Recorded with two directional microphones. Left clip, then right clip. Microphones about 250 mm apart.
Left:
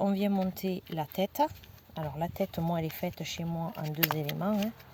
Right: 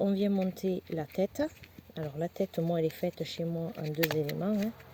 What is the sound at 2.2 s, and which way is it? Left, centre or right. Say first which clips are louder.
Speech: right 1 dB; left.